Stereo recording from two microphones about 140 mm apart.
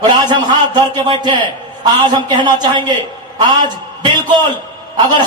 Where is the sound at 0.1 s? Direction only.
35° right (ahead or behind).